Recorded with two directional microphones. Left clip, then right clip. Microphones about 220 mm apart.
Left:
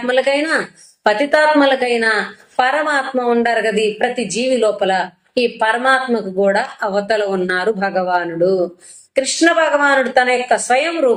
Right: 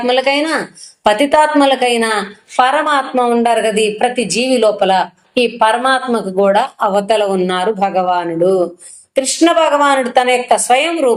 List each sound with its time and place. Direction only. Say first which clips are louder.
0.0 s a woman's voice: right 2 dB; 25° right (ahead or behind)